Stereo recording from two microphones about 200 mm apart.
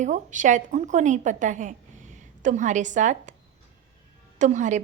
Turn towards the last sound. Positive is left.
turn(degrees=-35)  # may be behind; listen again after turning